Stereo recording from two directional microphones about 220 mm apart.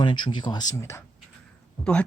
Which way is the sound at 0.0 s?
20° left (ahead or behind).